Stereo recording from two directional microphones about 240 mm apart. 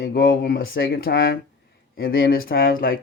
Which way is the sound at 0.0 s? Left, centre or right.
Left.